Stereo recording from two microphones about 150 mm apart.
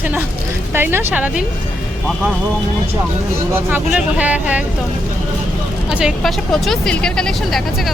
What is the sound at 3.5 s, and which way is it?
Speech, 15° right (ahead or behind).